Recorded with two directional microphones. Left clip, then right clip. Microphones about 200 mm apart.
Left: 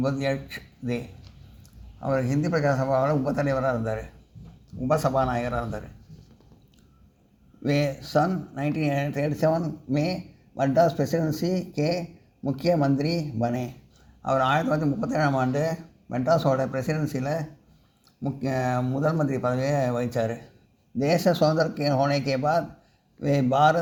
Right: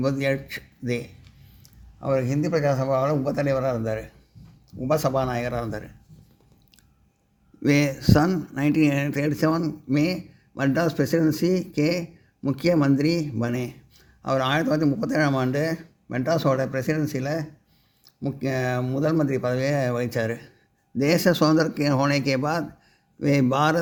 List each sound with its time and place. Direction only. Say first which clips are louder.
0.0 s a man's voice: right 2 dB; 45° right (ahead or behind)
7.6 s a man's voice: right 4 dB; 55° right (ahead or behind)